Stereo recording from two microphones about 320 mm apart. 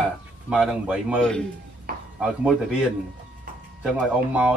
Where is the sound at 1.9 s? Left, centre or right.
Right.